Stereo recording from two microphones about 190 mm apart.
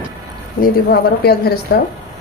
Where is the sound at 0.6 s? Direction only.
55° left (ahead or behind).